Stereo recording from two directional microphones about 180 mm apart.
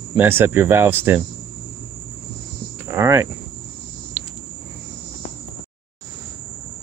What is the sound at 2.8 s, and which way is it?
Cricket, 15° right (ahead or behind).